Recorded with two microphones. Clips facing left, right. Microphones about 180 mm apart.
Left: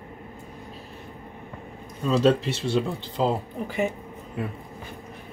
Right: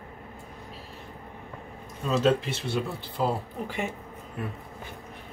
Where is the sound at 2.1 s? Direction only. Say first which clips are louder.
Left 3 dB; 30° left (ahead or behind).